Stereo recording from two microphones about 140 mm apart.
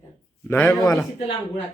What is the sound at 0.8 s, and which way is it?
Speech, 25° left (ahead or behind).